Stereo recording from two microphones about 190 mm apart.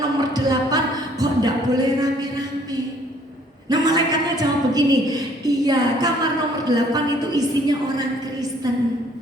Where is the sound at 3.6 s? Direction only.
20° right (ahead or behind).